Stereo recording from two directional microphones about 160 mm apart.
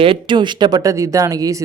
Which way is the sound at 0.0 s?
30° right (ahead or behind).